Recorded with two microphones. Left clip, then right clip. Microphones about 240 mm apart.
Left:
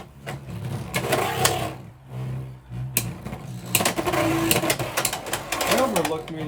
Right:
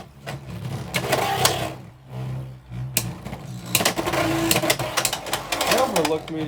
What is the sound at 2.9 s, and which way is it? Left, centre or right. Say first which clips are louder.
Sewing machine: right 2 dB; centre.